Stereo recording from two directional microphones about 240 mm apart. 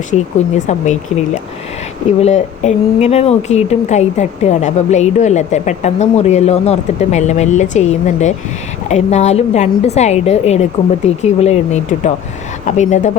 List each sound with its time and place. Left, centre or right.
0.1 s speech: left
2.2 s speech: left